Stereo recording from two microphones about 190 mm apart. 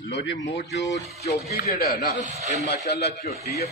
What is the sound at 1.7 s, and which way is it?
Speech, 55° left (ahead or behind).